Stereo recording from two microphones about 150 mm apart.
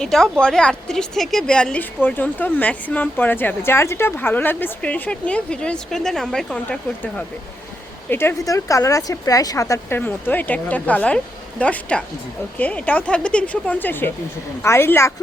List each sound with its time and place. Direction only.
0.0 s a woman's voice: 5° left (ahead or behind)